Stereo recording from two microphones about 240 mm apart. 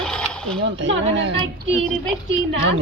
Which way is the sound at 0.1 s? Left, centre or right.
Centre.